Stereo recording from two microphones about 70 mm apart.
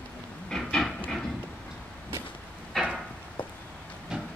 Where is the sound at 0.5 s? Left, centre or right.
Centre.